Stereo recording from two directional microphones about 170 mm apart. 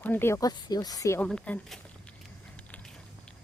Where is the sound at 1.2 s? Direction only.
5° left (ahead or behind).